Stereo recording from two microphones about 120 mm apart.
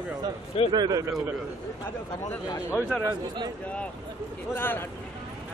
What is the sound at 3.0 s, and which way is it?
Speech, 35° right (ahead or behind).